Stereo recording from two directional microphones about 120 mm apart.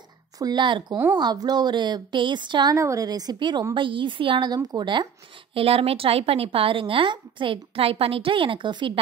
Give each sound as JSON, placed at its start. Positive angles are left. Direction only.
{"t": 0.4, "sound": "speech", "side_deg": -35}
{"t": 2.7, "sound": "a woman's voice", "side_deg": -25}
{"t": 5.5, "sound": "a woman's voice", "side_deg": -50}